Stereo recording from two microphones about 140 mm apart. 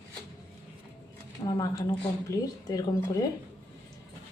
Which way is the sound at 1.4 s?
25° left (ahead or behind).